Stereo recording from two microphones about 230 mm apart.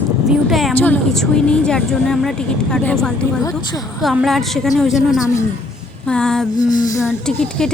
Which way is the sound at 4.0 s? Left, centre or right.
Centre.